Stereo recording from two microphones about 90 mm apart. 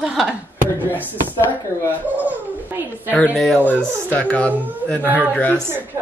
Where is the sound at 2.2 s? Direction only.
20° right (ahead or behind).